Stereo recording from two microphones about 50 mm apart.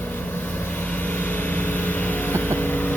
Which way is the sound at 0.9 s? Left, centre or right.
Left.